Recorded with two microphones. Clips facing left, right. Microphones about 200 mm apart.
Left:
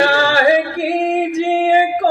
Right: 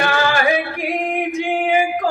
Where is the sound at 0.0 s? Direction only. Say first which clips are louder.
Left 4 dB; 35° left (ahead or behind).